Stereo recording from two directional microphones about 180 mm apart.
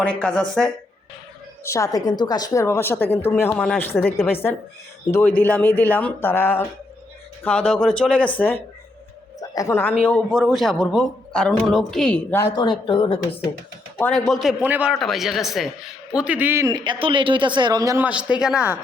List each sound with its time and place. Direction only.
0.2 s a man's voice: 5° left (ahead or behind)
1.6 s a woman's voice: 15° left (ahead or behind)
5.4 s a woman's voice: 10° left (ahead or behind)
9.4 s a woman's voice: 20° left (ahead or behind)
12.5 s speech: 25° left (ahead or behind)
14.0 s a man's voice: centre (ahead or behind)